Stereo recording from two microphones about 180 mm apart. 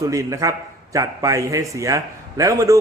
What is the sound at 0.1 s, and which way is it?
A man's voice, 20° right (ahead or behind).